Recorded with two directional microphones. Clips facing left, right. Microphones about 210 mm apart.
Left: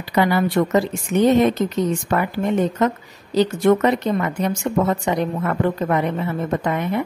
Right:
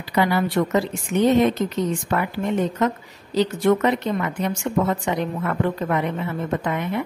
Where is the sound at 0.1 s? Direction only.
45° left (ahead or behind).